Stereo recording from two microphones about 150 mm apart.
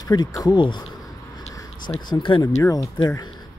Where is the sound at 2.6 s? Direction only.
20° left (ahead or behind).